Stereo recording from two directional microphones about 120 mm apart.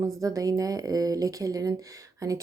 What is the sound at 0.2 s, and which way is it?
Speech, 30° right (ahead or behind).